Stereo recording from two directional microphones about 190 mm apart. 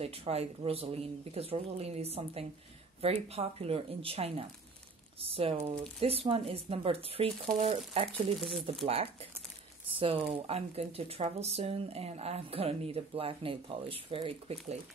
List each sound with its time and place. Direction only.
0.0 s speech: 30° right (ahead or behind)
8.4 s speech: centre (ahead or behind)
8.8 s speech: 30° right (ahead or behind)